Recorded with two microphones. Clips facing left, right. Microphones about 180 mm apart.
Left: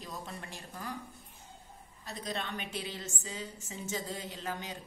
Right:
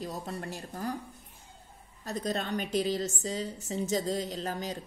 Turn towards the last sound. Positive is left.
turn(degrees=-35)  # may be behind; listen again after turning